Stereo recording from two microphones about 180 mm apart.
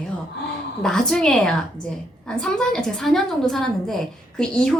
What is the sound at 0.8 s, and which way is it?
A woman's voice, 5° left (ahead or behind).